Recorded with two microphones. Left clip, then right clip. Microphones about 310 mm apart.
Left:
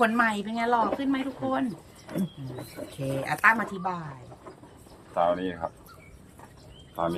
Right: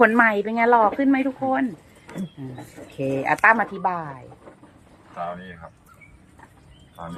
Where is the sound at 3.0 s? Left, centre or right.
Centre.